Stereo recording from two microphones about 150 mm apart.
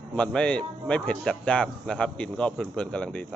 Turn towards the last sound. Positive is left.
turn(degrees=5)  # may be behind; listen again after turning